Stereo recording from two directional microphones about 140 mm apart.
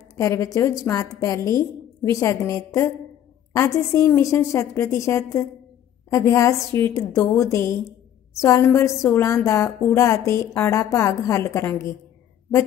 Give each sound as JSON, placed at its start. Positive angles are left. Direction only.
{"t": 0.1, "sound": "a woman's voice", "side_deg": 20}